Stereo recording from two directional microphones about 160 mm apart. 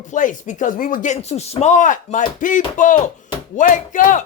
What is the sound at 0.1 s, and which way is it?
A man's voice, 50° left (ahead or behind).